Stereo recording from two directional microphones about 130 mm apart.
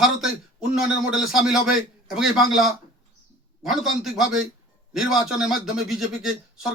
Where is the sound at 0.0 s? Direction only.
Centre (ahead or behind).